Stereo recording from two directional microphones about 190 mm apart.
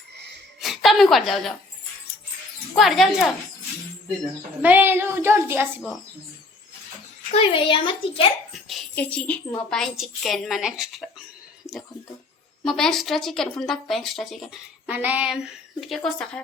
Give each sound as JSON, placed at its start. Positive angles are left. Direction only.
{"t": 0.6, "sound": "a sound", "side_deg": 0}
{"t": 2.7, "sound": "a woman's voice", "side_deg": 0}
{"t": 4.6, "sound": "a child's voice", "side_deg": -10}
{"t": 7.3, "sound": "a woman's voice", "side_deg": 25}
{"t": 8.5, "sound": "a woman's voice", "side_deg": 0}
{"t": 12.6, "sound": "a woman's voice", "side_deg": 0}